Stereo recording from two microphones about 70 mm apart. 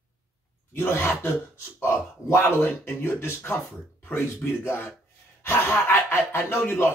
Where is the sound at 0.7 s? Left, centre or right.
Left.